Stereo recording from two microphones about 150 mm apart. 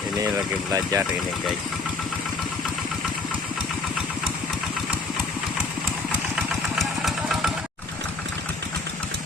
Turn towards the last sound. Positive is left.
turn(degrees=0)  # may be behind; listen again after turning